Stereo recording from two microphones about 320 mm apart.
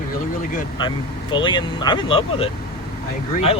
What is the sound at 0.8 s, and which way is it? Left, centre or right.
Speech, centre.